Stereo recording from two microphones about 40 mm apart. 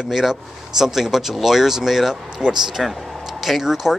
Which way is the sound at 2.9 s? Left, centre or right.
Centre.